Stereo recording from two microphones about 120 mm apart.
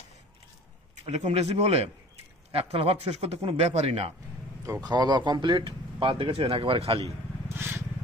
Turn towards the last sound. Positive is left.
turn(degrees=-20)  # may be behind; listen again after turning